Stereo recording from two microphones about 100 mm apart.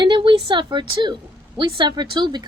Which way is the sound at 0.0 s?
50° right (ahead or behind).